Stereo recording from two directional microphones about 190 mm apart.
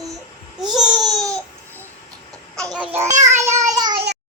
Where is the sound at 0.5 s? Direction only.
Centre (ahead or behind).